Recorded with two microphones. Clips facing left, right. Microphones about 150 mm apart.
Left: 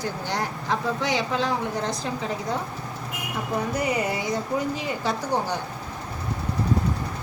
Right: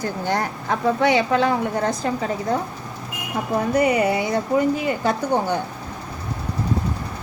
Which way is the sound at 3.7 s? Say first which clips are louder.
Right 10 dB; 65° right (ahead or behind).